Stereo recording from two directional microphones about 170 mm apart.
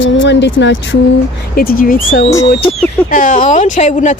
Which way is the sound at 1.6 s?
60° left (ahead or behind).